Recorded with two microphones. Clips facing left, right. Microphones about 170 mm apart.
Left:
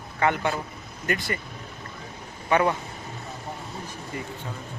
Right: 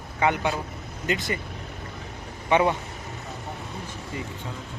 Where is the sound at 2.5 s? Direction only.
20° right (ahead or behind).